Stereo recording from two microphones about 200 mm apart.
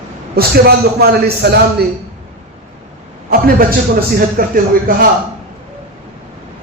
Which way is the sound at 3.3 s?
45° right (ahead or behind).